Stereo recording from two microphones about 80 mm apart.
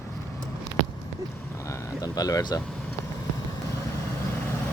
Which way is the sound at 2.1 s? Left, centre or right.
Left.